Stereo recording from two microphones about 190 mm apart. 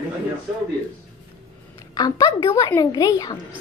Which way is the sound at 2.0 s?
20° left (ahead or behind).